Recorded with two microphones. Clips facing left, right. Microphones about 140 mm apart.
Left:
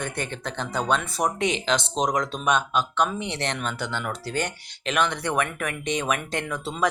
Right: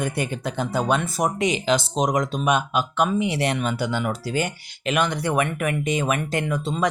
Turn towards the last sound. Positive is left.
turn(degrees=0)  # may be behind; listen again after turning